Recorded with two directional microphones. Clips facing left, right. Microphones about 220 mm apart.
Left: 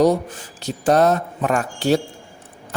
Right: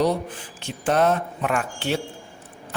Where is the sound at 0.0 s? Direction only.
45° left (ahead or behind).